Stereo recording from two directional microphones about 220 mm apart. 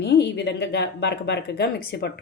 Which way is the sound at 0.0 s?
50° left (ahead or behind).